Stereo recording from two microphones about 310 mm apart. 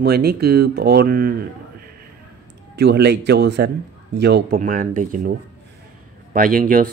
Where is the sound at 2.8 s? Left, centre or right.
Right.